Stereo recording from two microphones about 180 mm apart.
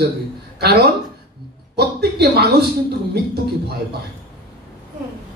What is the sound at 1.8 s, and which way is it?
Speech, 65° right (ahead or behind).